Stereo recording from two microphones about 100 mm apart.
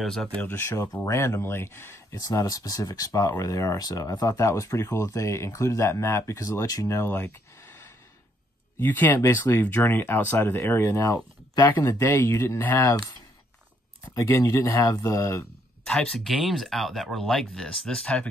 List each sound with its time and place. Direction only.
0.0 s speech: 5° left (ahead or behind)
0.4 s speech: 25° left (ahead or behind)
14.1 s speech: 30° left (ahead or behind)
15.8 s speech: 5° left (ahead or behind)